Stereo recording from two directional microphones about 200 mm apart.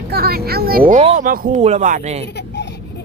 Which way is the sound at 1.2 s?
45° right (ahead or behind).